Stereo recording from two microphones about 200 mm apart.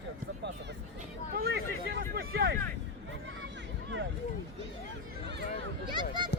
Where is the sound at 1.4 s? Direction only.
50° right (ahead or behind).